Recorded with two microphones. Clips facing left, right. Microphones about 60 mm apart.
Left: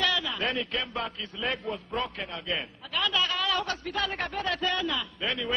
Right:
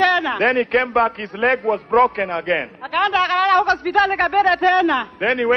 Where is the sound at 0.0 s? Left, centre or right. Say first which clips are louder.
Right 12 dB; right.